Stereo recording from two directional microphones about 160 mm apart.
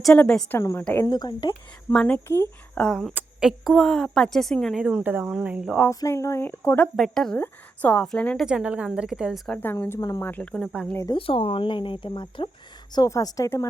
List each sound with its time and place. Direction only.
0.0 s speech: 5° left (ahead or behind)
0.6 s a woman's voice: 20° left (ahead or behind)
1.9 s speech: 5° left (ahead or behind)
2.8 s speech: centre (ahead or behind)
5.9 s speech: 20° left (ahead or behind)
6.8 s speech: 5° left (ahead or behind)
8.4 s speech: 5° right (ahead or behind)
9.5 s speech: 10° left (ahead or behind)
10.2 s speech: 10° left (ahead or behind)
11.1 s a woman's voice: 35° left (ahead or behind); by 13.7 s 20° left (ahead or behind)